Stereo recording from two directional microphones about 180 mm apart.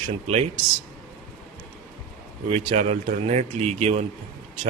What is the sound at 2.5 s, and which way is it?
Speech, 40° right (ahead or behind).